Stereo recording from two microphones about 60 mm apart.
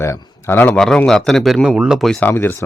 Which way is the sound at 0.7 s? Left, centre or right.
Centre.